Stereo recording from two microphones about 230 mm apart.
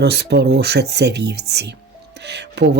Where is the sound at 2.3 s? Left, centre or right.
Right.